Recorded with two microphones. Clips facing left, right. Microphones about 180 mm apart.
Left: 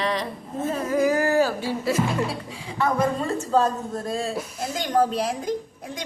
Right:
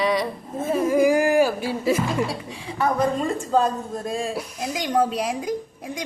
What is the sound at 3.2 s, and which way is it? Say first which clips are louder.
A woman's voice: right 1 dB; 15° right (ahead or behind).